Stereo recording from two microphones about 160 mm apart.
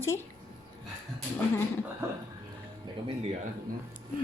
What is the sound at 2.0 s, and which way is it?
Music, 15° right (ahead or behind).